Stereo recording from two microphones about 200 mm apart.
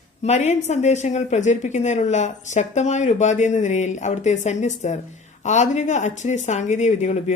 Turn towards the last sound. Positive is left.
turn(degrees=35)  # may be behind; listen again after turning